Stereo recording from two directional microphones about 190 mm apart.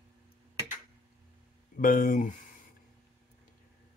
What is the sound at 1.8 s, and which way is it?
Mantra, 45° left (ahead or behind).